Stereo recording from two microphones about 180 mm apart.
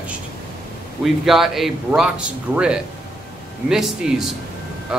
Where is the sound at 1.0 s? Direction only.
Centre (ahead or behind).